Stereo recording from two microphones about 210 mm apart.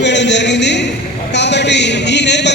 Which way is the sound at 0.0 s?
55° left (ahead or behind).